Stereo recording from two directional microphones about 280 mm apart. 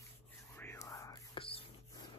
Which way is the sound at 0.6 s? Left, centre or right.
Centre.